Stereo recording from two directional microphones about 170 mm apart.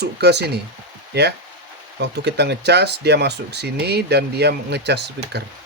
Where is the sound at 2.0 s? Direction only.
80° right.